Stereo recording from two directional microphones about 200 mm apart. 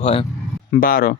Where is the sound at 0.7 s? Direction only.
45° left (ahead or behind).